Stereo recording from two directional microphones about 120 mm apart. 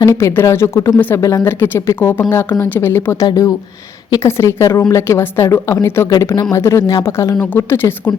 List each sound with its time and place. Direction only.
0.0 s speech: 25° left (ahead or behind)
6.1 s a woman's voice: 30° left (ahead or behind)